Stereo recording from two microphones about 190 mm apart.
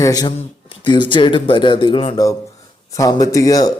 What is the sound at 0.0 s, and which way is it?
A man's voice, 20° left (ahead or behind).